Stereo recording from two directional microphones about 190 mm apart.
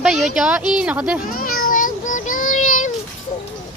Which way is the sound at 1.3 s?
50° left (ahead or behind).